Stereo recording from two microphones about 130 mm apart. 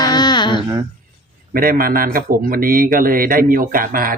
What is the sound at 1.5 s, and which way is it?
A man's voice, 90° right.